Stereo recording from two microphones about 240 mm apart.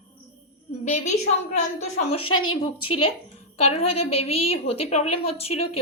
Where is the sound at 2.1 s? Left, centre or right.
Left.